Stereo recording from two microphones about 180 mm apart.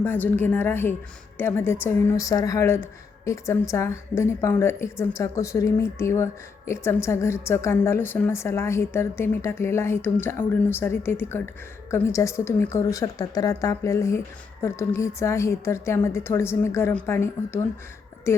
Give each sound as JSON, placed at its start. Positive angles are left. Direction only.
{"t": 0.0, "sound": "a woman's voice", "side_deg": 10}